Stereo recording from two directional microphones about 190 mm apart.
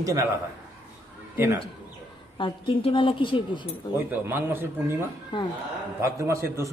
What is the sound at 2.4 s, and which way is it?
A woman's voice, 25° left (ahead or behind).